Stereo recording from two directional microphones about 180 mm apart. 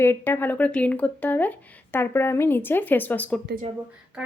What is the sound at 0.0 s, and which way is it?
Speech, 10° left (ahead or behind).